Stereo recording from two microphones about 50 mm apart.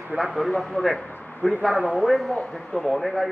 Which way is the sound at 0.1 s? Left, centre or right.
Centre.